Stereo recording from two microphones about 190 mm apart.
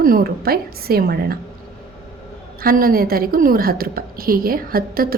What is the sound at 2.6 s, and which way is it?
A woman's voice, 50° right (ahead or behind).